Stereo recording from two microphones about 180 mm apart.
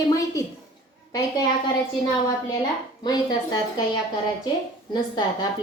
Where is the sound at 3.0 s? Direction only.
20° left (ahead or behind).